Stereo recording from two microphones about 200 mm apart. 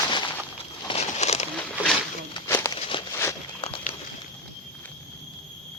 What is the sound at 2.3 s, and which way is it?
Walk, 15° left (ahead or behind).